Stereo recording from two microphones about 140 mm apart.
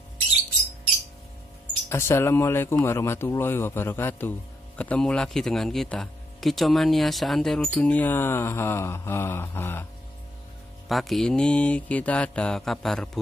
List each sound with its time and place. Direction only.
1.9 s speech: 20° left (ahead or behind)
10.9 s mantra: centre (ahead or behind)